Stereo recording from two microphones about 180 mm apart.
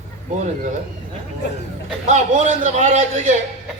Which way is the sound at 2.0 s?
40° right (ahead or behind).